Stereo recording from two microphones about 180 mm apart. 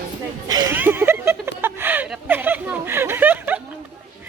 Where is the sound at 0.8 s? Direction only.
10° right (ahead or behind).